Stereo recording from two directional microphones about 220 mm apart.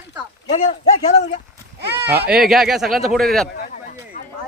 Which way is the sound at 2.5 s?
Centre (ahead or behind).